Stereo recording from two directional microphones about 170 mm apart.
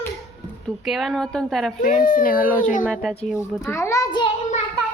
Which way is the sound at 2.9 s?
Centre (ahead or behind).